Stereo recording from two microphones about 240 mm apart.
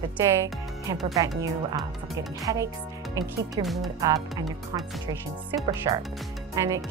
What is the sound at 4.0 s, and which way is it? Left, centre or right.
Speech, centre.